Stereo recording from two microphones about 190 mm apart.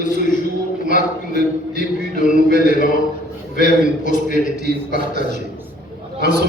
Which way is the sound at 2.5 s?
45° left (ahead or behind).